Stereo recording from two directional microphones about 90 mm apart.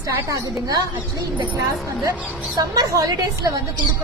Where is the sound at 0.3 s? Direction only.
45° right (ahead or behind).